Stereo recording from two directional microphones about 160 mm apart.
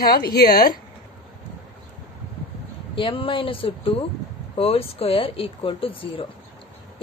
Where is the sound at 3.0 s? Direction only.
35° left (ahead or behind).